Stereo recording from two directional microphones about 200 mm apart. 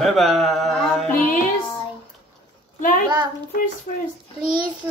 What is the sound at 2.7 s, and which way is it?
A child's voice, 40° left (ahead or behind).